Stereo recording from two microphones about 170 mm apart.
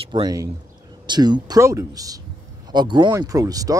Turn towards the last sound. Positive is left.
turn(degrees=-20)  # may be behind; listen again after turning